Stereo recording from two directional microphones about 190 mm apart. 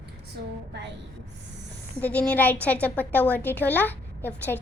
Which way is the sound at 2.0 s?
5° left (ahead or behind).